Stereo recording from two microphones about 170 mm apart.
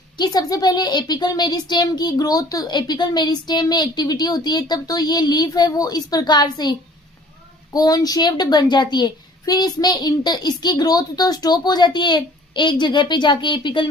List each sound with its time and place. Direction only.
0.2 s speech: 20° left (ahead or behind)